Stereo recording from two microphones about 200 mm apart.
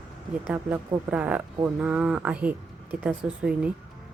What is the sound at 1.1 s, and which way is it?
Speech, 5° right (ahead or behind).